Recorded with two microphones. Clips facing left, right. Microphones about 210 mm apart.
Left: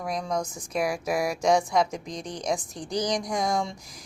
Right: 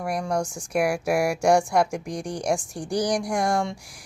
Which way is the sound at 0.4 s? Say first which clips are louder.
Right 4 dB; 75° right (ahead or behind).